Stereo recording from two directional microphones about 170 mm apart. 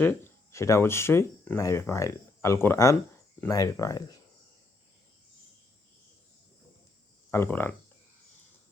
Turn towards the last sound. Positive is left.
turn(degrees=15)  # may be behind; listen again after turning